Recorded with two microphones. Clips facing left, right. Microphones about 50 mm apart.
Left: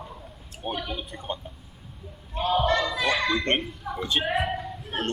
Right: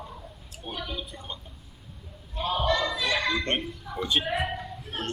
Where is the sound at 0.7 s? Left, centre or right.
Left.